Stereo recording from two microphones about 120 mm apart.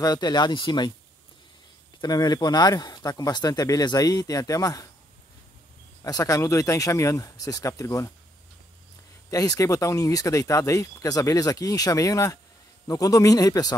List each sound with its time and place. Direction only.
0.0 s speech: 35° left (ahead or behind)
2.0 s speech: 35° left (ahead or behind)
6.0 s speech: 30° left (ahead or behind)
9.3 s speech: 30° left (ahead or behind)